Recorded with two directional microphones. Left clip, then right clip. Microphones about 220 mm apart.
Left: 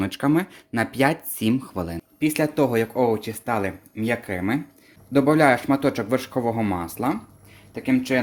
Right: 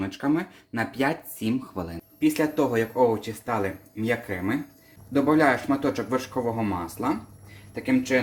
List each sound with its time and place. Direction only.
0.0 s speech: 50° left (ahead or behind)